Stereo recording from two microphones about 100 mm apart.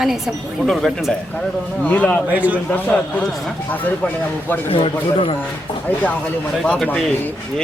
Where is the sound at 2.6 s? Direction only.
15° left (ahead or behind).